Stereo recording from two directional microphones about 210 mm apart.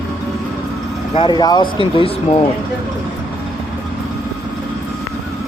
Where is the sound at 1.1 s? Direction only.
20° left (ahead or behind).